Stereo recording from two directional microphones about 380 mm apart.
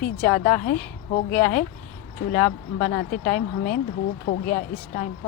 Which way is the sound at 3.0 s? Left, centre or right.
Left.